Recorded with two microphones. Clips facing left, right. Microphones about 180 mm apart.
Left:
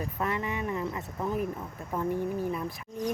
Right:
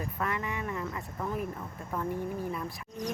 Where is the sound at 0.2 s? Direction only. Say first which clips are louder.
Left 3 dB; 25° left (ahead or behind).